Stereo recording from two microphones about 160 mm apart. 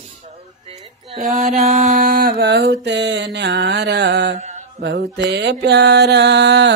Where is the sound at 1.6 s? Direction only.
50° right (ahead or behind); by 4.3 s 90° right.